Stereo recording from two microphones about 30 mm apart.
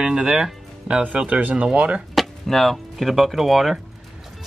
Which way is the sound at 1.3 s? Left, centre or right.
Right.